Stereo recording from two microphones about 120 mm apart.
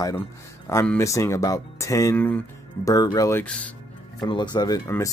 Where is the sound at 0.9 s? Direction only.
25° left (ahead or behind).